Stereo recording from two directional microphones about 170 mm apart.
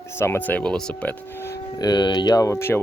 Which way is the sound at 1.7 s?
25° left (ahead or behind).